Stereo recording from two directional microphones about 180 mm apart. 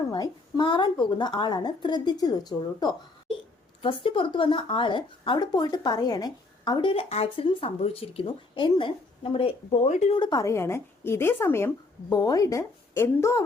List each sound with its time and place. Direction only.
0.1 s speech: 25° left (ahead or behind); by 10.2 s 40° left (ahead or behind)
10.2 s a woman's voice: 25° left (ahead or behind)